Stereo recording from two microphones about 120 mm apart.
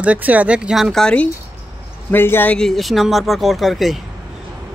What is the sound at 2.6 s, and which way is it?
Speech, 5° left (ahead or behind).